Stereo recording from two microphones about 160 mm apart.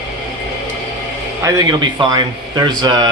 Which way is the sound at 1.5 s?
25° right (ahead or behind).